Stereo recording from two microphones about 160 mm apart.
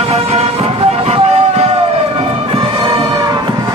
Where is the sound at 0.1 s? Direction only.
40° right (ahead or behind).